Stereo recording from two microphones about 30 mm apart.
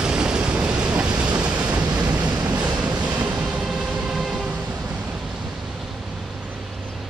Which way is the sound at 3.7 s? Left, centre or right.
Centre.